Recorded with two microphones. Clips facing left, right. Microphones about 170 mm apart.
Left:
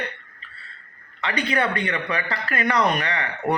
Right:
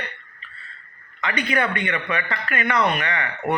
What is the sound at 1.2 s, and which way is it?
Speech, 30° left (ahead or behind).